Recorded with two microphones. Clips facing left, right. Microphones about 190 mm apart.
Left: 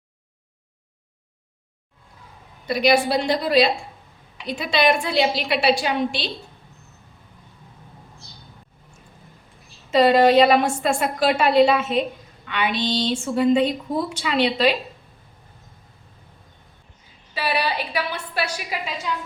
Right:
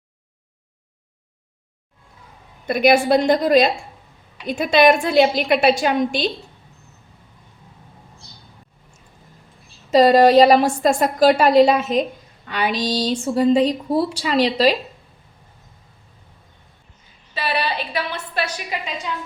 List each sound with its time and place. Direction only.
2.6 s a woman's voice: 50° right (ahead or behind)
9.9 s a woman's voice: 40° right (ahead or behind)
17.3 s a woman's voice: 10° left (ahead or behind)